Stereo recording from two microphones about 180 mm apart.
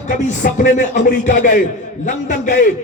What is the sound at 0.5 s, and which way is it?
Speech, 45° left (ahead or behind).